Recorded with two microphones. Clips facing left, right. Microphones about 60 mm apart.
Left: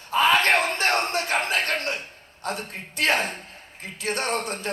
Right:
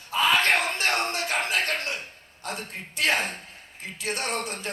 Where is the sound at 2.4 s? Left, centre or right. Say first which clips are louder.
Left 4 dB; left.